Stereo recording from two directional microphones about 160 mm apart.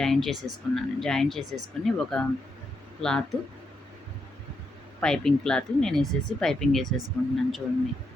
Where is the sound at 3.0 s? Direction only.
5° left (ahead or behind).